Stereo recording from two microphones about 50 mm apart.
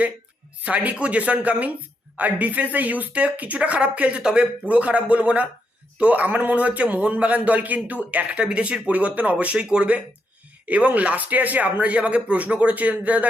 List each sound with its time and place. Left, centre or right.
0.6 s speech: right
8.4 s speech: centre
10.7 s speech: right